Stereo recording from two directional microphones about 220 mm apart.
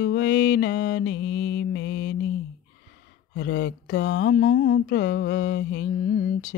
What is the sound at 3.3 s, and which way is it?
Speech, 55° left (ahead or behind).